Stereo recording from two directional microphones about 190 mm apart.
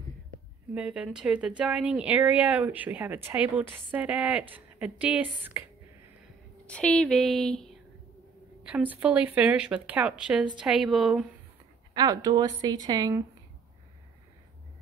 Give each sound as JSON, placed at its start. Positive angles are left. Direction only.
{"t": 0.7, "sound": "a woman's voice", "side_deg": -5}
{"t": 6.6, "sound": "speech", "side_deg": 5}
{"t": 8.6, "sound": "a woman's voice", "side_deg": -10}
{"t": 11.9, "sound": "speech", "side_deg": -20}